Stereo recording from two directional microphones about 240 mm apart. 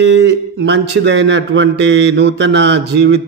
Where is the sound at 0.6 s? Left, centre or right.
Right.